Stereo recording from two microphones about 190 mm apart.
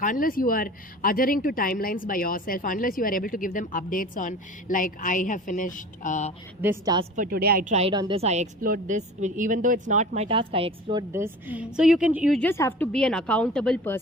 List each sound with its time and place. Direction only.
0.0 s speech: 45° left (ahead or behind)
6.6 s a woman's voice: 10° right (ahead or behind)
7.2 s a woman's voice: 55° right (ahead or behind)
7.7 s a woman's voice: 35° right (ahead or behind)
11.1 s a woman's voice: 10° right (ahead or behind)
12.4 s a woman's voice: 15° left (ahead or behind)